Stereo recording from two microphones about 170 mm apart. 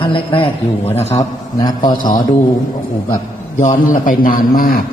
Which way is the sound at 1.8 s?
50° left (ahead or behind).